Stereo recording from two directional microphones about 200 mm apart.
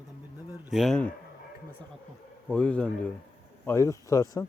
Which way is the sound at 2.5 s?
5° left (ahead or behind).